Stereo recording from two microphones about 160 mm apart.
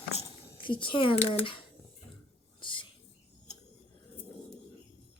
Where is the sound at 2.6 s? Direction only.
30° left (ahead or behind).